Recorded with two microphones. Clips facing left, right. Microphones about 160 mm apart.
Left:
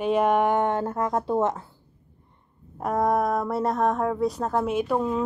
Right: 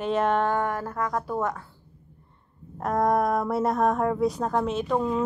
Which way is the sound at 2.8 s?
5° left (ahead or behind).